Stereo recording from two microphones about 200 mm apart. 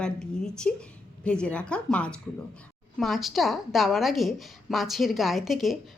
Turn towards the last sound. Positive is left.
turn(degrees=0)  # may be behind; listen again after turning